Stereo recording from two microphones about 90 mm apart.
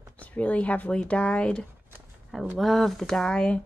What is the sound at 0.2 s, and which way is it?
Speech, 15° left (ahead or behind).